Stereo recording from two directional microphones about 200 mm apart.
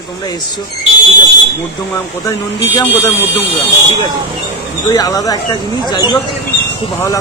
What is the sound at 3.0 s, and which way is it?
Speech, 15° left (ahead or behind).